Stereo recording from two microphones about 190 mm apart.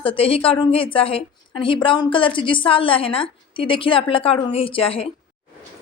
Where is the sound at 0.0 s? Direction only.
30° left (ahead or behind).